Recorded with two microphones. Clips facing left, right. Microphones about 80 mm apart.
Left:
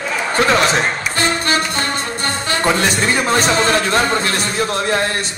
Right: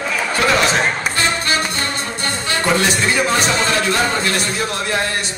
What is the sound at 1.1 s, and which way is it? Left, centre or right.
Music, left.